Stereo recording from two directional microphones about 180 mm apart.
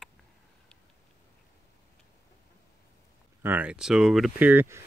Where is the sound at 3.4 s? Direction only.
10° right (ahead or behind).